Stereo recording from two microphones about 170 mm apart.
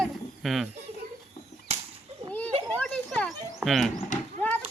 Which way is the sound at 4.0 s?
45° left (ahead or behind).